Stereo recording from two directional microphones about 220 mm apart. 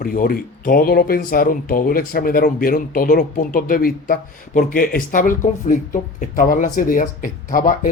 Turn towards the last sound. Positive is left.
turn(degrees=40)  # may be behind; listen again after turning